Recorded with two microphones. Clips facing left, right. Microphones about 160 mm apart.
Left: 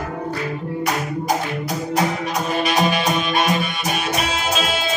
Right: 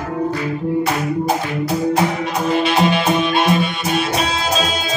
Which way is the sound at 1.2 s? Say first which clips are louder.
Right 3 dB; 30° right (ahead or behind).